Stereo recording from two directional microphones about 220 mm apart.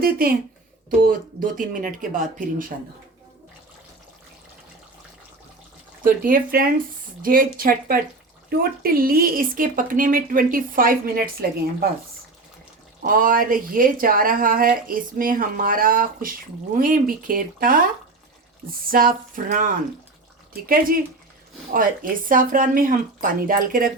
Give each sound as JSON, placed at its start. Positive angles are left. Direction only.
{"t": 0.0, "sound": "speech", "side_deg": -40}
{"t": 6.0, "sound": "speech", "side_deg": -40}
{"t": 13.1, "sound": "speech", "side_deg": -40}
{"t": 18.9, "sound": "speech", "side_deg": -40}
{"t": 20.7, "sound": "speech", "side_deg": -40}